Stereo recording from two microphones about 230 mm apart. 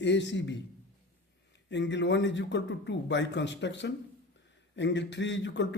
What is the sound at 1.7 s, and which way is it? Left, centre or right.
A man's voice, left.